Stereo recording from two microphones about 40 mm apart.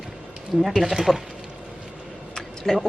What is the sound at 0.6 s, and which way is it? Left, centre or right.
Speech, centre.